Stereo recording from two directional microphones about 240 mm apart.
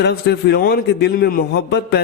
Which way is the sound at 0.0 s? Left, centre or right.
Left.